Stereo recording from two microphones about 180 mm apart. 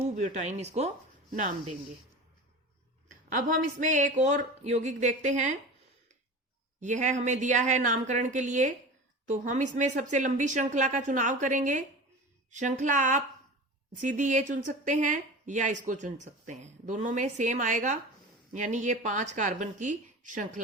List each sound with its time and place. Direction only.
0.0 s speech: 40° right (ahead or behind)
1.3 s speech: 45° right (ahead or behind)
3.3 s speech: 45° right (ahead or behind)
6.7 s speech: 45° right (ahead or behind)